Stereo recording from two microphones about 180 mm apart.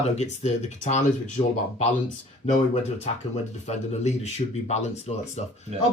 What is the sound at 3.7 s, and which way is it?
Speech, 40° left (ahead or behind).